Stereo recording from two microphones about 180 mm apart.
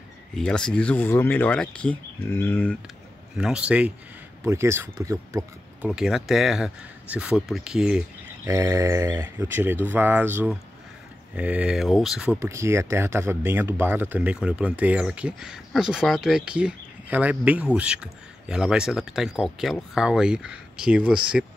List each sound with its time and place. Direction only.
0.4 s speech: 5° left (ahead or behind)
3.3 s speech: 5° right (ahead or behind)
5.9 s speech: 5° right (ahead or behind)
8.5 s speech: 15° right (ahead or behind)
12.4 s speech: 15° right (ahead or behind)